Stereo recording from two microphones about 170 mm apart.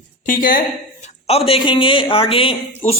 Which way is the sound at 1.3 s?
35° left (ahead or behind).